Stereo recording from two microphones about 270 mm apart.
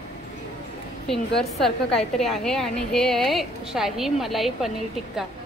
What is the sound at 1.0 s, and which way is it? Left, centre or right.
A woman's voice, centre.